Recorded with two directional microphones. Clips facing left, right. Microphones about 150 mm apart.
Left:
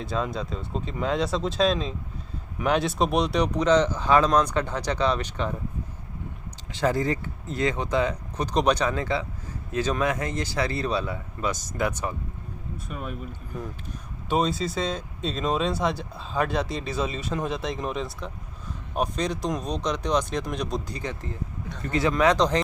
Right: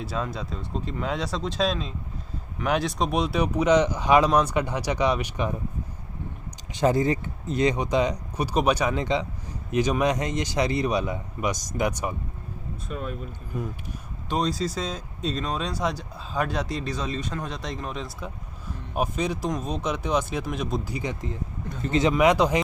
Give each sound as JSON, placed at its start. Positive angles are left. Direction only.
{"t": 0.0, "sound": "speech", "side_deg": -5}
{"t": 6.7, "sound": "speech", "side_deg": -20}
{"t": 12.9, "sound": "speech", "side_deg": 5}
{"t": 14.3, "sound": "speech", "side_deg": 5}
{"t": 22.1, "sound": "speech", "side_deg": -10}